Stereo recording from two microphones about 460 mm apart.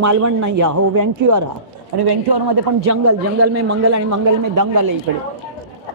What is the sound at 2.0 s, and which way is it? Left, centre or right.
Speech, right.